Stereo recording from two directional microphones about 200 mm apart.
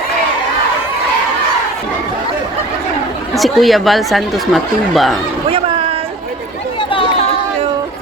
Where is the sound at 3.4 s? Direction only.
Centre (ahead or behind).